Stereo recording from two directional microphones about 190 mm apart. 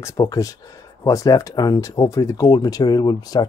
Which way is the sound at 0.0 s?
15° left (ahead or behind).